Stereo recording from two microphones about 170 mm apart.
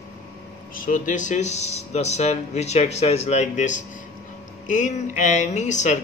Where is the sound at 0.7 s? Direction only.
50° left (ahead or behind).